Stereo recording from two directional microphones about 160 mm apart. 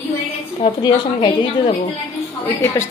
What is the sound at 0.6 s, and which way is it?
A woman's voice, 30° left (ahead or behind).